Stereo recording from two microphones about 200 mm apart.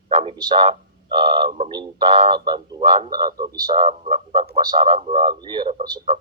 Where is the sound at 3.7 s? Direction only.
30° right (ahead or behind).